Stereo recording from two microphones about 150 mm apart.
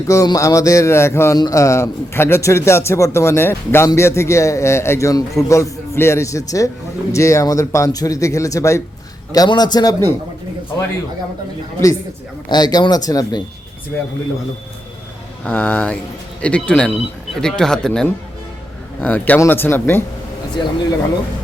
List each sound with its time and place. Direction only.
0.1 s speech: 20° left (ahead or behind)
12.5 s speech: 25° left (ahead or behind)
15.4 s speech: 10° left (ahead or behind)
20.6 s speech: 30° left (ahead or behind)